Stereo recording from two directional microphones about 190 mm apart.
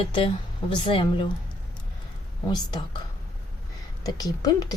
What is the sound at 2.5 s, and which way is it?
Speech, 20° left (ahead or behind).